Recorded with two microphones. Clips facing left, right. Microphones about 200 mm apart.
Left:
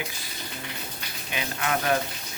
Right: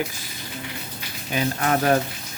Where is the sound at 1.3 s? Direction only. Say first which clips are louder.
Right 6 dB; 40° right (ahead or behind).